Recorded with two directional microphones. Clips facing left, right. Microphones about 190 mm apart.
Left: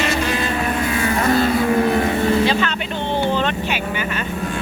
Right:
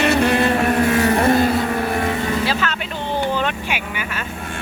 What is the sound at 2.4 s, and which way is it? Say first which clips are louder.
Vehicle: left 3 dB; 5° right (ahead or behind).